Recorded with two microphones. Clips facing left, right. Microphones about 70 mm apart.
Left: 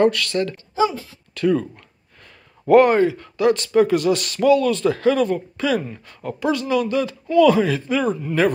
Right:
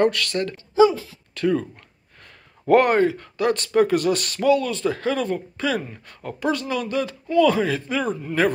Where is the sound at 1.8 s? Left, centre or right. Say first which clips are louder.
Left 1 dB; right.